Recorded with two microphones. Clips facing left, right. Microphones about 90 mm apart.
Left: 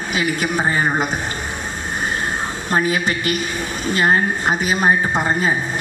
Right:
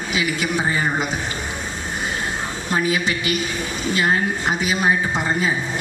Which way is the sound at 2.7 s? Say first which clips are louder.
Left 2 dB; 45° left (ahead or behind).